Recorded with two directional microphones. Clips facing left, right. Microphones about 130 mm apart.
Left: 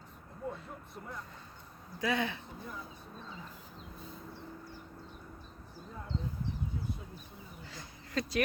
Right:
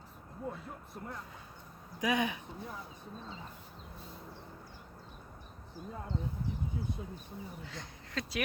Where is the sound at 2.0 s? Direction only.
15° right (ahead or behind).